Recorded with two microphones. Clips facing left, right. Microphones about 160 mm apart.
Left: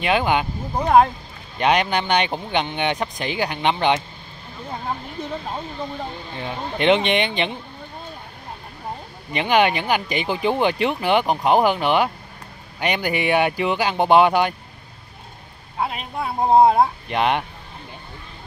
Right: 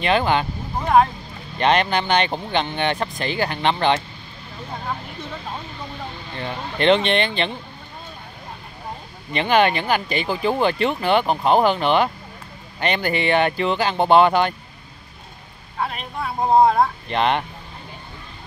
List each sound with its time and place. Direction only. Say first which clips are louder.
0.0 s speech: right 1 dB; 10° left (ahead or behind)
6.3 s speech: right 1 dB; 10° left (ahead or behind)
9.3 s speech: right 1 dB; 10° left (ahead or behind)
15.8 s speech: left 1 dB; 25° left (ahead or behind)
17.1 s speech: even; 10° left (ahead or behind)